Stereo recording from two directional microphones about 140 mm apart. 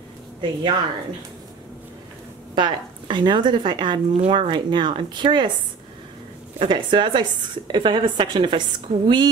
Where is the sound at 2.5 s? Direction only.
35° right (ahead or behind).